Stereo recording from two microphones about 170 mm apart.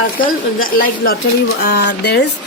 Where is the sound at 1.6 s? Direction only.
80° left.